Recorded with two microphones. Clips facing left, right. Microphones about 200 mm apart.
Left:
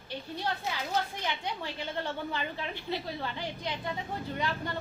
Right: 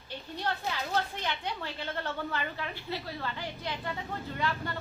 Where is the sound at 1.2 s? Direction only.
15° left (ahead or behind).